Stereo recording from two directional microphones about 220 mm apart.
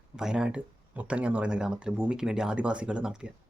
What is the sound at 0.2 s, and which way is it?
Speech, 5° right (ahead or behind).